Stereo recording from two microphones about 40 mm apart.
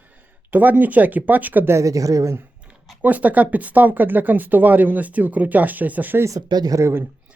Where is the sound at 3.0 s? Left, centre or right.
Right.